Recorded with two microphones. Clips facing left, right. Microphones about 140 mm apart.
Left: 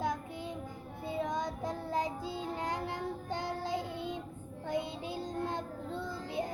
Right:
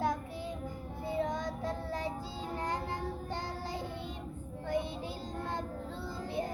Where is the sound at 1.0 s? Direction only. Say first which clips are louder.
Right 1 dB; 15° left (ahead or behind).